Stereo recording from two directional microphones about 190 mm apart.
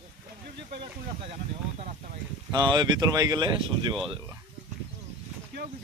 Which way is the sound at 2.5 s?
20° right (ahead or behind).